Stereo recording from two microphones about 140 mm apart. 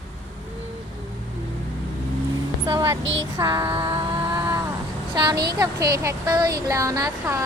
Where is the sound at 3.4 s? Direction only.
25° right (ahead or behind).